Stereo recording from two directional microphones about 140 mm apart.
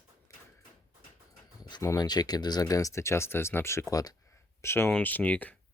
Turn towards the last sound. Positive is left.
turn(degrees=10)  # may be behind; listen again after turning